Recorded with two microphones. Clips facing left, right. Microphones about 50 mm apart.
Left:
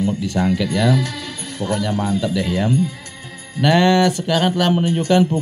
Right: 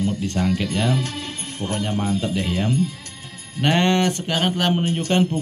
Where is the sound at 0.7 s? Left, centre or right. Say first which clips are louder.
Left 4 dB; right.